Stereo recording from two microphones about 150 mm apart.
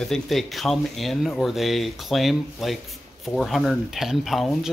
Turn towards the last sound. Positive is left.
turn(degrees=0)  # may be behind; listen again after turning